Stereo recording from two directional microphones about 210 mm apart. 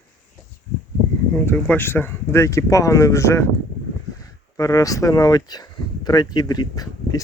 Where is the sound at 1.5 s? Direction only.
10° left (ahead or behind).